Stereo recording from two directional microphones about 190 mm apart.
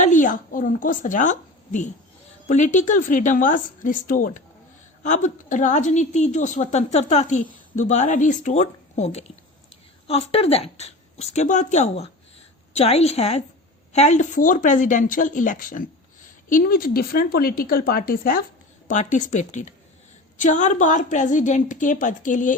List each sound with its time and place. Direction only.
0.0 s a woman's voice: 45° left (ahead or behind)
18.9 s a woman's voice: 40° left (ahead or behind)